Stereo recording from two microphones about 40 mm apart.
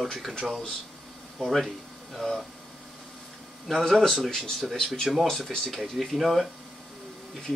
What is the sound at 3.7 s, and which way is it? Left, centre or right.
Speech, centre.